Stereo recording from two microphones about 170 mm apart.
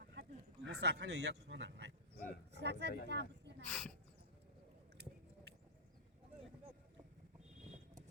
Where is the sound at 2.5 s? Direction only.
90° right.